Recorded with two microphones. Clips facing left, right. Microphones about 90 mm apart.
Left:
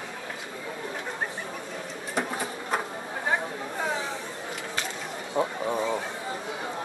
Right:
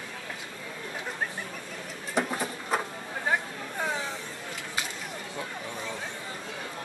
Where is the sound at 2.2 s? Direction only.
Centre (ahead or behind).